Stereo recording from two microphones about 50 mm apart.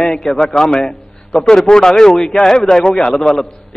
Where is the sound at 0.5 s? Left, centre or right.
Centre.